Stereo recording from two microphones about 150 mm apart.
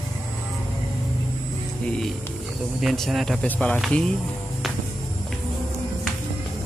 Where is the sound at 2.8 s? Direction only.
Centre (ahead or behind).